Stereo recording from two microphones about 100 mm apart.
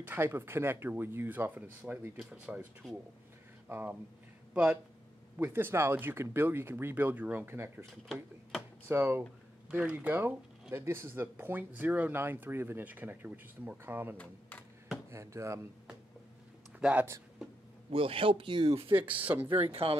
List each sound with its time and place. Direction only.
0.0 s speech: 20° right (ahead or behind)
5.4 s speech: 20° right (ahead or behind)
8.1 s speech: centre (ahead or behind)
8.8 s speech: 20° right (ahead or behind)
14.1 s speech: 10° left (ahead or behind)
15.0 s speech: 30° right (ahead or behind)
16.8 s speech: 15° right (ahead or behind)
17.9 s a man's voice: 65° right (ahead or behind)
18.7 s speech: 70° right (ahead or behind)
18.9 s speech: 15° right (ahead or behind)
19.4 s speech: 65° right (ahead or behind)